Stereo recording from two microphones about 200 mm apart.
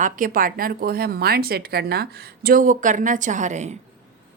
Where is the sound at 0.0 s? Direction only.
45° right (ahead or behind).